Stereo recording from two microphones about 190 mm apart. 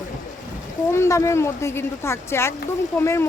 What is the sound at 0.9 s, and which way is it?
Speech, 15° left (ahead or behind).